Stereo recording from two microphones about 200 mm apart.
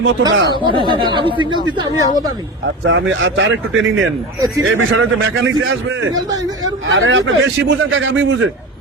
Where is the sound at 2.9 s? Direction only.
75° right (ahead or behind).